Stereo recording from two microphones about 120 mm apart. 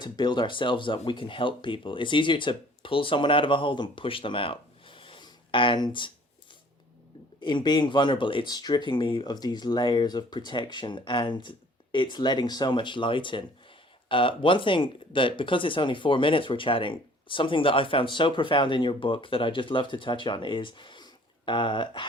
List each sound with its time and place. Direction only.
0.0 s speech: 40° left (ahead or behind)
7.4 s speech: 40° left (ahead or behind)